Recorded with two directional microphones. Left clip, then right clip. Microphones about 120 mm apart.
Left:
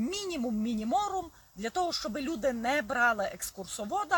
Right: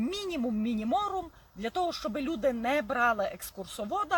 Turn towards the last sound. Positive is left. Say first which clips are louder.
# right 1 dB
turn(degrees=-15)  # may be behind; listen again after turning